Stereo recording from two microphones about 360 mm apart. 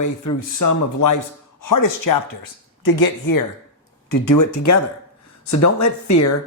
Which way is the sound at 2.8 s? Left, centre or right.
Left.